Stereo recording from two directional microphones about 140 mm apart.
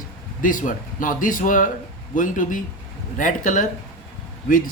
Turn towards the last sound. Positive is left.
turn(degrees=75)  # may be behind; listen again after turning